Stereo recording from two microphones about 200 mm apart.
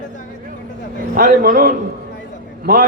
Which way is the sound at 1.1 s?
50° right (ahead or behind).